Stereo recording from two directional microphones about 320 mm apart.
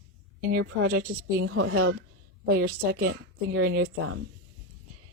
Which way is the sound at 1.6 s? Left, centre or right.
Right.